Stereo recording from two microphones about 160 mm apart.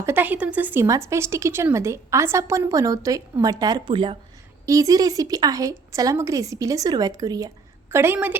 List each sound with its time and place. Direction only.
0.0 s speech: 10° right (ahead or behind); by 4.2 s 30° right (ahead or behind)
4.6 s speech: 20° right (ahead or behind)